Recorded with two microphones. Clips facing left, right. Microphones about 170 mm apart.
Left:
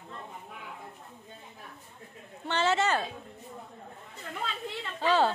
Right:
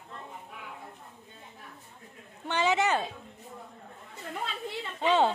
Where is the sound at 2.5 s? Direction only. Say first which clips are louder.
Even; 15° right (ahead or behind).